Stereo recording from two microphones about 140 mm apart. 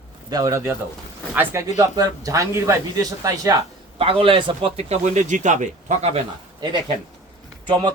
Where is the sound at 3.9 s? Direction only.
40° right (ahead or behind).